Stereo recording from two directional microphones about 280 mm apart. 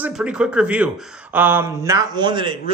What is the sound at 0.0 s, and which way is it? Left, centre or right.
Speech, centre.